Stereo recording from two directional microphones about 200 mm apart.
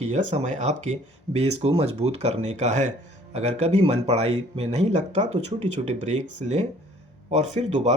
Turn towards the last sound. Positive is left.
turn(degrees=-35)  # may be behind; listen again after turning